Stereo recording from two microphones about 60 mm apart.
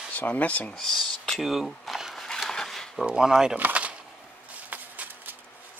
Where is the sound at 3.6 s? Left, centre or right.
Right.